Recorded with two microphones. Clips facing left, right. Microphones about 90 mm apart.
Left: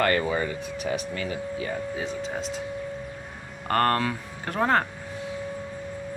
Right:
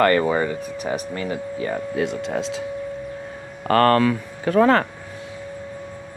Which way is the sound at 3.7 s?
90° right.